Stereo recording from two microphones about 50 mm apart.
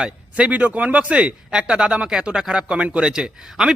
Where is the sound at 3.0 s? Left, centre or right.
Centre.